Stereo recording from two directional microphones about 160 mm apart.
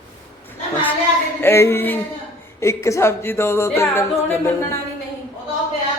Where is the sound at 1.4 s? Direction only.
15° left (ahead or behind).